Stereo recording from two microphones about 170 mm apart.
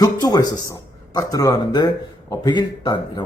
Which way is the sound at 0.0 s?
20° left (ahead or behind).